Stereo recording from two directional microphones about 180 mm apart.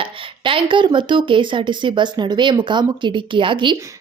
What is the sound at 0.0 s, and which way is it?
A woman's voice, 30° right (ahead or behind).